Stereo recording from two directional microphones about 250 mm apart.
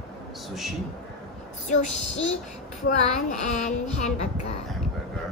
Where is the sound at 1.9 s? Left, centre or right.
Left.